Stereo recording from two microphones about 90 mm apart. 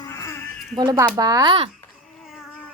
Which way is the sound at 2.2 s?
5° right (ahead or behind).